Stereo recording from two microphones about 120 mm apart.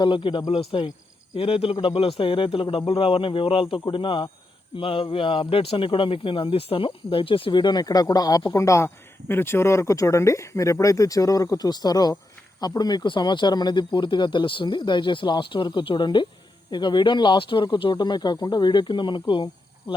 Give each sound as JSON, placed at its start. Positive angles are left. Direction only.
{"t": 0.0, "sound": "speech", "side_deg": 45}